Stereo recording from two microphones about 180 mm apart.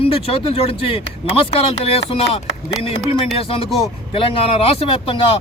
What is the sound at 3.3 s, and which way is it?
Speech, 30° left (ahead or behind).